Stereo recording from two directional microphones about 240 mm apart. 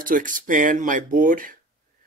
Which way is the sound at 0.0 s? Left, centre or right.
Right.